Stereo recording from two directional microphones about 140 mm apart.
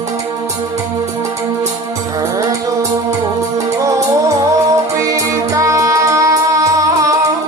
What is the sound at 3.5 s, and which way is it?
Music, 25° right (ahead or behind).